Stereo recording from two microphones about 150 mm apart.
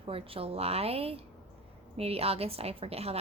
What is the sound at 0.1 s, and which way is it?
A woman's voice, 40° right (ahead or behind).